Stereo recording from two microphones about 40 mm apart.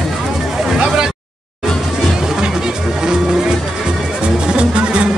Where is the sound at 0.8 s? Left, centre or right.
Right.